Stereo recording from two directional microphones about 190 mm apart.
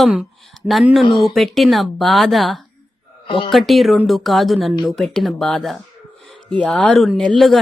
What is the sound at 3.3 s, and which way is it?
Speech, 30° left (ahead or behind).